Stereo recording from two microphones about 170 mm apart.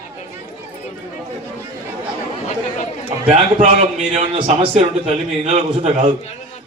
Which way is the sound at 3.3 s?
40° right (ahead or behind).